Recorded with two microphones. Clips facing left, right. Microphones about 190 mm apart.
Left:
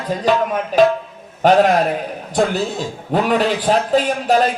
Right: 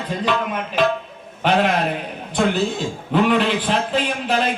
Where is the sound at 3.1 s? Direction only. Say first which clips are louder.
Left 1 dB; 40° left (ahead or behind).